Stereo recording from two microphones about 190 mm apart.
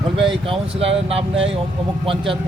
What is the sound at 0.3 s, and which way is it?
A man's voice, 30° right (ahead or behind).